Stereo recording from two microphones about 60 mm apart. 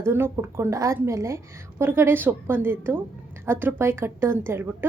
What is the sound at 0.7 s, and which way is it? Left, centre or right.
Speech, right.